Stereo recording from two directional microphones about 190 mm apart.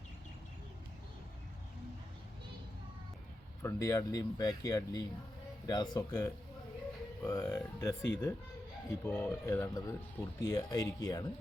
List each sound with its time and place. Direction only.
3.6 s speech: 15° left (ahead or behind)